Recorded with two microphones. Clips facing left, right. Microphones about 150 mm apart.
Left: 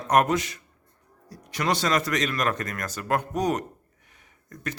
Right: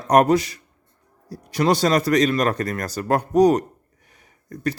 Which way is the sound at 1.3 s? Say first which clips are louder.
Right 7 dB; 35° right (ahead or behind).